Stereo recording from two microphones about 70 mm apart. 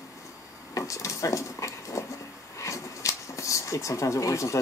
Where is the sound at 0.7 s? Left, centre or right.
Left.